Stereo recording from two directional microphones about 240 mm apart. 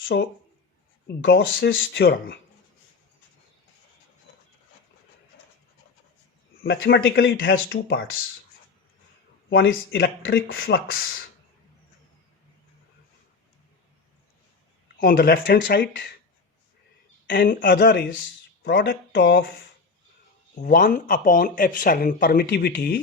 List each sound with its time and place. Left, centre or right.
0.1 s speech: left
6.6 s speech: left
9.5 s speech: left
14.9 s speech: left
17.2 s speech: left
20.6 s speech: left